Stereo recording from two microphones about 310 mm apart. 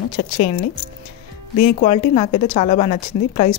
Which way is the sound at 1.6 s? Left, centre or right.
Left.